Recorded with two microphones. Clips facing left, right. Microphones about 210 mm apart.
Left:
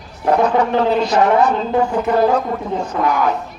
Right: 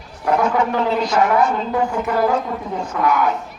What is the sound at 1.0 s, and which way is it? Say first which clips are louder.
A woman's voice: left 3 dB; 30° left (ahead or behind).